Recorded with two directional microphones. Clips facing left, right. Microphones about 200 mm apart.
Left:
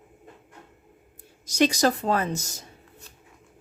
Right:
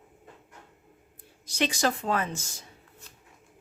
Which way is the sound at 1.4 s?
40° left (ahead or behind).